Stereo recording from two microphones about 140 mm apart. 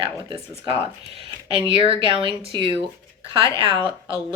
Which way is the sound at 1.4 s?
40° right (ahead or behind).